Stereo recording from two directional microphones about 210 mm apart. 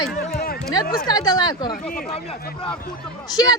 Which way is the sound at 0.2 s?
45° left (ahead or behind).